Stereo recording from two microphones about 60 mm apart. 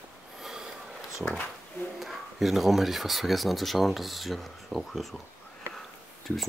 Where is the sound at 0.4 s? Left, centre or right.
Centre.